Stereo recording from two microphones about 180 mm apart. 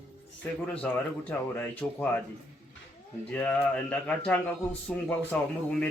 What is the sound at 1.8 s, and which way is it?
Speech, 10° left (ahead or behind).